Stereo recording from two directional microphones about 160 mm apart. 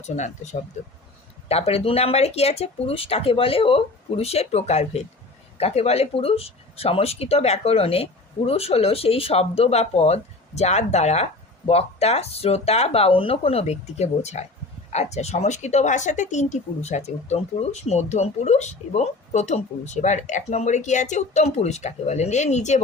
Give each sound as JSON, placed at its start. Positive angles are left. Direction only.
{"t": 1.5, "sound": "speech", "side_deg": 40}